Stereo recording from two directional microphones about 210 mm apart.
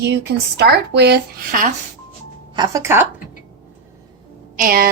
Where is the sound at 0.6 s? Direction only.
50° right (ahead or behind).